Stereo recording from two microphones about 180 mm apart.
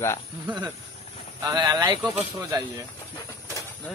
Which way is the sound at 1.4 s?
20° right (ahead or behind).